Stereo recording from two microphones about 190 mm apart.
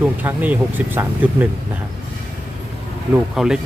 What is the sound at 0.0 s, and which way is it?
Speech, 10° right (ahead or behind).